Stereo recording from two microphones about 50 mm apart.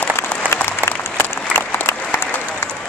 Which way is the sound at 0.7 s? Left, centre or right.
Left.